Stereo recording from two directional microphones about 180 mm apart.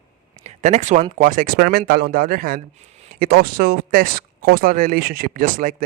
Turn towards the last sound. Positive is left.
turn(degrees=-50)  # may be behind; listen again after turning